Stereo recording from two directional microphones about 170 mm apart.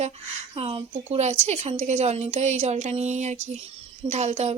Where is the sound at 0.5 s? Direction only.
35° right (ahead or behind).